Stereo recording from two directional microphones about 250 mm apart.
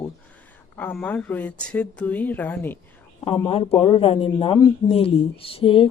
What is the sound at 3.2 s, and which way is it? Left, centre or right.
Speech, centre.